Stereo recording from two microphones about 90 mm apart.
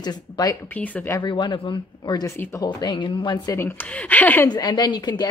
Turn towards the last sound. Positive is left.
turn(degrees=55)  # may be behind; listen again after turning